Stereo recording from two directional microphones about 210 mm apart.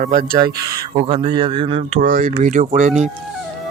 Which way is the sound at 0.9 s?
25° right (ahead or behind).